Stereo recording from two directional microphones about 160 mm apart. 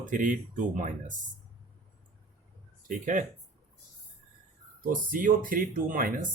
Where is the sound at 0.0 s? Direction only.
55° right (ahead or behind).